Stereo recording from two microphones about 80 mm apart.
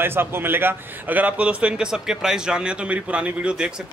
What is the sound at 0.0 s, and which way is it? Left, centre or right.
A man's voice, right.